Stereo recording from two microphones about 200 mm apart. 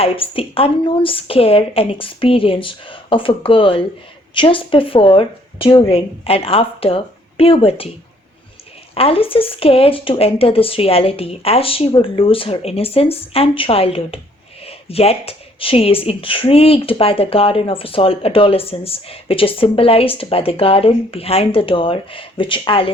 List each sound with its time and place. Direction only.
0.0 s speech: 25° left (ahead or behind)
9.0 s speech: 30° left (ahead or behind)